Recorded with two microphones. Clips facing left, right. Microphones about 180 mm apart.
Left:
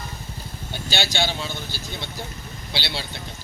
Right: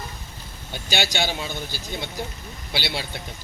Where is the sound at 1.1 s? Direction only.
15° right (ahead or behind).